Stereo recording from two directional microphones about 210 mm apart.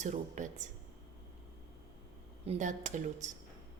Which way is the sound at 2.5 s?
35° right (ahead or behind).